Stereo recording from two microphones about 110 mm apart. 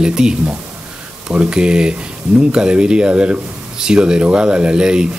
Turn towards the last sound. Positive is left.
turn(degrees=-10)  # may be behind; listen again after turning